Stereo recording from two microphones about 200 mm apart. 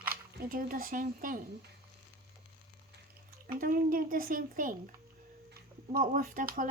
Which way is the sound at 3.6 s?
45° right (ahead or behind).